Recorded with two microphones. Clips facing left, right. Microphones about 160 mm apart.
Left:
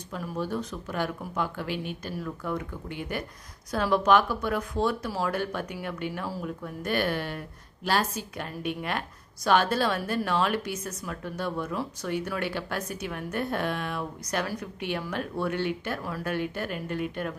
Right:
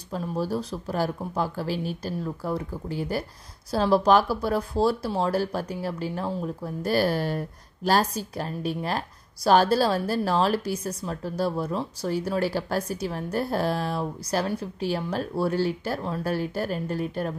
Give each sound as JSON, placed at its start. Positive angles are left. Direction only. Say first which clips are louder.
{"t": 0.1, "sound": "speech", "louder": "right 4 dB", "side_deg": -35}